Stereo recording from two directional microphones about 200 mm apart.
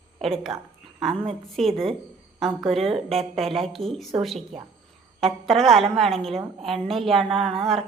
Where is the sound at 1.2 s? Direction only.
Centre (ahead or behind).